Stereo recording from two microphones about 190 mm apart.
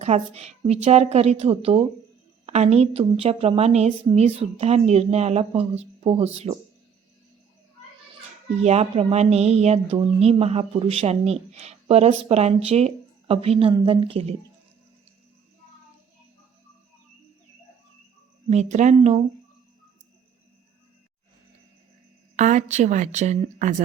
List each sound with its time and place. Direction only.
0.0 s speech: 35° right (ahead or behind)
8.6 s speech: 35° right (ahead or behind)
18.4 s speech: 35° right (ahead or behind)
22.4 s speech: 40° right (ahead or behind)